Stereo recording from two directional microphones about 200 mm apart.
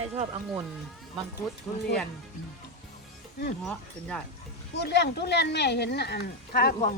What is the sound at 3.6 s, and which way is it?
Speech, 5° left (ahead or behind).